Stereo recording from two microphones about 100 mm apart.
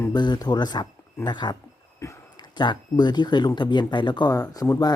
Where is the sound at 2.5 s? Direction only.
50° left (ahead or behind).